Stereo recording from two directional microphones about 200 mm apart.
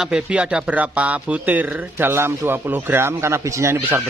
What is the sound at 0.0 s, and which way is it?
A man's voice, 5° right (ahead or behind).